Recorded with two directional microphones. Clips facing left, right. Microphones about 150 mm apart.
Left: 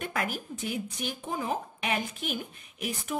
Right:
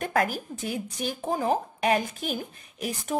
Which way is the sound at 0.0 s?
40° right (ahead or behind).